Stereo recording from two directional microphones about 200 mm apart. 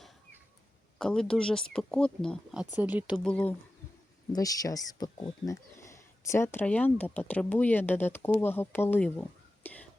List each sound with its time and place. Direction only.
0.9 s speech: 5° left (ahead or behind)
3.2 s speech: 5° left (ahead or behind)
4.3 s speech: 20° left (ahead or behind)